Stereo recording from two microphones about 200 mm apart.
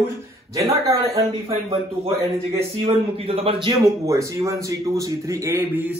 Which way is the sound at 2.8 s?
30° right (ahead or behind).